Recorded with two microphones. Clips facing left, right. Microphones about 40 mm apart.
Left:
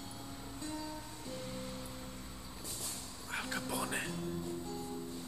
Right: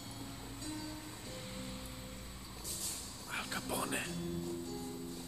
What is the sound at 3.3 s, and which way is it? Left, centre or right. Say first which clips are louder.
Music: left 1 dB; centre.